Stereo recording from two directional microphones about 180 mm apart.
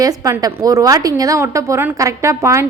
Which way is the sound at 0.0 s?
20° right (ahead or behind).